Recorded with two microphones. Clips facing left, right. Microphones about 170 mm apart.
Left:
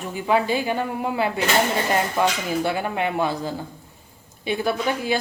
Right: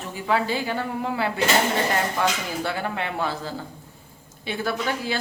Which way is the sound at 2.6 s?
15° left (ahead or behind).